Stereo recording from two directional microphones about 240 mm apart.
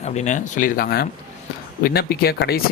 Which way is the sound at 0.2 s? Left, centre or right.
Left.